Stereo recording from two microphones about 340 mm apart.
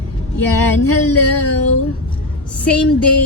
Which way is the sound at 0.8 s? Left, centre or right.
Left.